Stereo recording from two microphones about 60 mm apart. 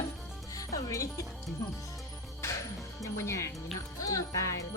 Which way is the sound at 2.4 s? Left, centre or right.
Left.